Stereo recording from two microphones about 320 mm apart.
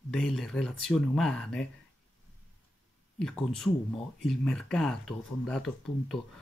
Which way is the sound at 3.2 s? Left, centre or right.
Centre.